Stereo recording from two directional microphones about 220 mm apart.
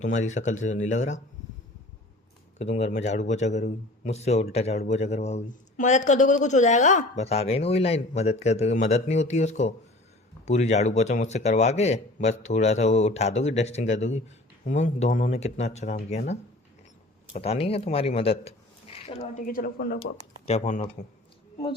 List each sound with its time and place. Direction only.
0.0 s a man's voice: 35° left (ahead or behind)
2.6 s a man's voice: 30° left (ahead or behind)
19.5 s a man's voice: 40° left (ahead or behind)
20.4 s speech: 30° left (ahead or behind)